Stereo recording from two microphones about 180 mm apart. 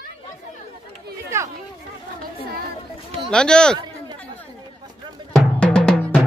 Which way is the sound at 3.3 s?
5° left (ahead or behind).